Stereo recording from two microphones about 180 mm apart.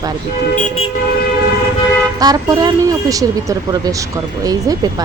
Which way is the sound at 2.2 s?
20° right (ahead or behind).